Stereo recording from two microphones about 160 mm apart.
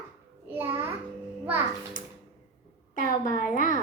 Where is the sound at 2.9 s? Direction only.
55° left (ahead or behind).